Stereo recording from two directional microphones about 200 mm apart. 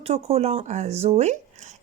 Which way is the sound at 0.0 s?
30° right (ahead or behind).